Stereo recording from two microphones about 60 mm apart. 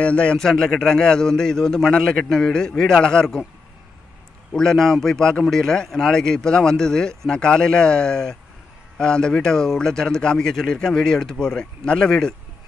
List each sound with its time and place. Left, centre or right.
0.0 s a man's voice: centre
4.6 s a man's voice: centre